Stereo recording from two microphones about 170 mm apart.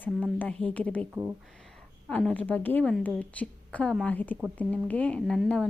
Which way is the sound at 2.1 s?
10° left (ahead or behind).